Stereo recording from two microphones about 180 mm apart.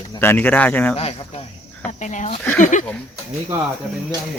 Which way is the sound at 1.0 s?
35° left (ahead or behind).